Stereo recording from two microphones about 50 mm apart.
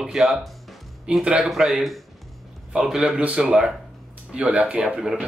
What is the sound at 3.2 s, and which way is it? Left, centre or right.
Speech, right.